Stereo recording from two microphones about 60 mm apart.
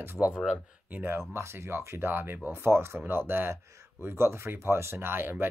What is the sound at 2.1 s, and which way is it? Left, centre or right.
Speech, right.